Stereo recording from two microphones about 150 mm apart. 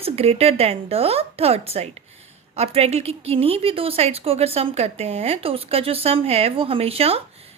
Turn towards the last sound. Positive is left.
turn(degrees=-40)  # may be behind; listen again after turning